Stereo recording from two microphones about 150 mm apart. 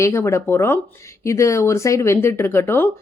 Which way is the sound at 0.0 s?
20° left (ahead or behind).